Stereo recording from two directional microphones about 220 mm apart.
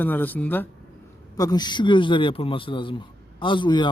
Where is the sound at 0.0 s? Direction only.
10° left (ahead or behind).